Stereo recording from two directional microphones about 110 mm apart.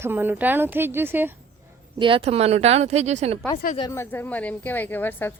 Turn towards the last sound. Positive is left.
turn(degrees=20)  # may be behind; listen again after turning